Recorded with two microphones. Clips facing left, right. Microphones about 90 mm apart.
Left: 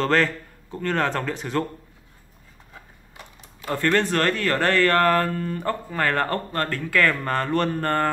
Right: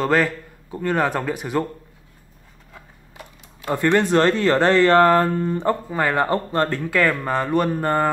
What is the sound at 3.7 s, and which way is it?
Speech, 15° right (ahead or behind).